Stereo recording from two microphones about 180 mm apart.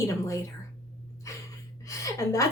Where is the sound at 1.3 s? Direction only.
15° left (ahead or behind).